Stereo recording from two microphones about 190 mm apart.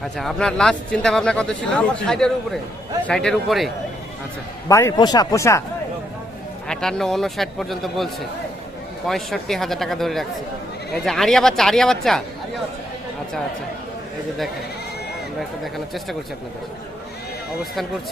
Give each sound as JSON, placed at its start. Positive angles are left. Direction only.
{"t": 0.0, "sound": "speech", "side_deg": 0}
{"t": 4.7, "sound": "speech", "side_deg": 15}
{"t": 6.7, "sound": "speech", "side_deg": 0}
{"t": 15.4, "sound": "speech", "side_deg": 0}